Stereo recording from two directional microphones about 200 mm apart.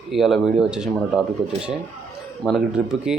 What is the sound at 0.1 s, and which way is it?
Speech, centre (ahead or behind).